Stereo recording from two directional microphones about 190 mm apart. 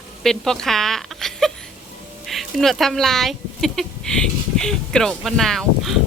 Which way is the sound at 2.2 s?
Centre (ahead or behind).